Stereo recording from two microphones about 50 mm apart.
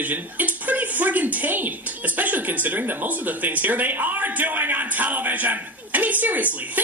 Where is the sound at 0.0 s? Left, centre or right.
Right.